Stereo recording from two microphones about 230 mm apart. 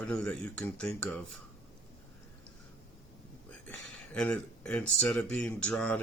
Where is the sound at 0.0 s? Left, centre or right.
Centre.